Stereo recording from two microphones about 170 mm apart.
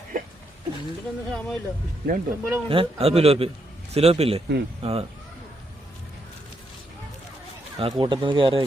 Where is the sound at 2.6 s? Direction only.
35° right (ahead or behind).